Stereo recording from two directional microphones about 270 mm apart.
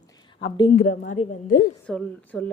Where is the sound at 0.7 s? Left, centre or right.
Left.